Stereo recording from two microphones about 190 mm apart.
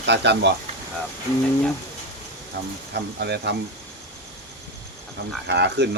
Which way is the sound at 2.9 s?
60° right (ahead or behind).